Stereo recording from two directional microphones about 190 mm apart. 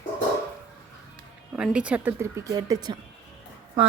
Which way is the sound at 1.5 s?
5° right (ahead or behind).